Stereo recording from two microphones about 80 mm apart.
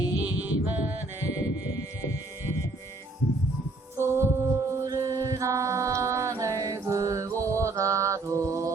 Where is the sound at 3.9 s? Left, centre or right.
Right.